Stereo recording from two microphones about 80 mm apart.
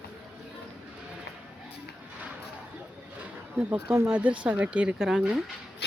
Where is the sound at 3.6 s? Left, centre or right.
Centre.